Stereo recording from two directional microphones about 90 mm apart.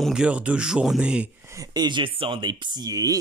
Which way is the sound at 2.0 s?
80° right.